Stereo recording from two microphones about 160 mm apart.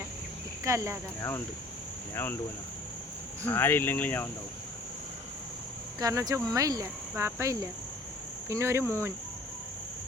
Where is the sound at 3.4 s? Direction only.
15° left (ahead or behind).